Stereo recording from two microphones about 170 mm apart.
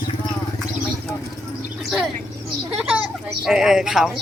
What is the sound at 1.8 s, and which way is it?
Speech, centre (ahead or behind).